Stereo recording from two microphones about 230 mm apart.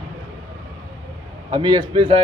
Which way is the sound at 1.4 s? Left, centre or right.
Centre.